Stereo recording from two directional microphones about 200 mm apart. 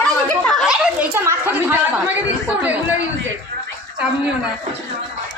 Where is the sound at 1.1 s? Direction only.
15° right (ahead or behind).